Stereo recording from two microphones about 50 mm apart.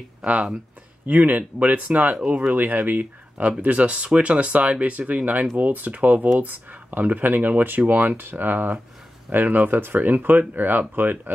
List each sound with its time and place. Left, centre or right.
0.2 s speech: right